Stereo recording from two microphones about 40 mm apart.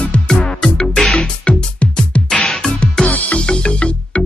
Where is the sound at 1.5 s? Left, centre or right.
Left.